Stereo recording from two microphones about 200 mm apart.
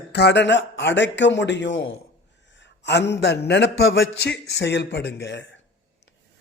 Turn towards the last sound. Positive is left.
turn(degrees=60)  # may be behind; listen again after turning